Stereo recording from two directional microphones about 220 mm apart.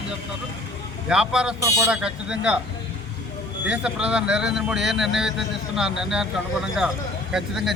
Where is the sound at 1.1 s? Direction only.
5° right (ahead or behind).